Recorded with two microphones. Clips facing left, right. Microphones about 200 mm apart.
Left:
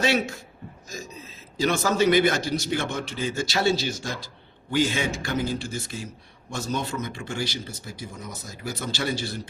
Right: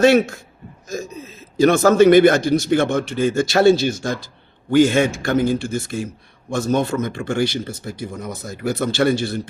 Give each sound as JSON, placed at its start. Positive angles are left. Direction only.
{"t": 0.0, "sound": "a man's voice", "side_deg": -50}
{"t": 1.5, "sound": "a man's voice", "side_deg": -55}